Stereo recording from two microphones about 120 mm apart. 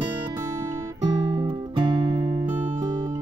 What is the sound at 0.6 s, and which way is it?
Guitar, 35° right (ahead or behind).